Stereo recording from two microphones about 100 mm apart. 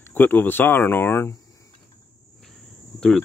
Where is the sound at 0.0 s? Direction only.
20° left (ahead or behind).